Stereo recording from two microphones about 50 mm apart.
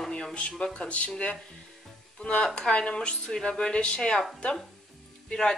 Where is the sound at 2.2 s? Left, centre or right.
Left.